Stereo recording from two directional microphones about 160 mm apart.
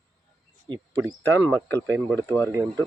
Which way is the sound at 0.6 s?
30° right (ahead or behind).